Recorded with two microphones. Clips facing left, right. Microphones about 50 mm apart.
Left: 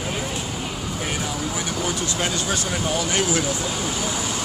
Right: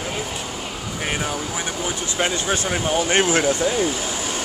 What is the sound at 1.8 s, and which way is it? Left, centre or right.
Speech, right.